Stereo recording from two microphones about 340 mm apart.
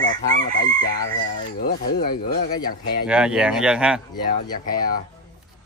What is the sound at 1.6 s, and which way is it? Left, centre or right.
Speech, left.